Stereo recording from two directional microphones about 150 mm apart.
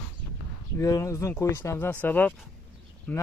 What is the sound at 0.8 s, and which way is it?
Speech, 20° left (ahead or behind).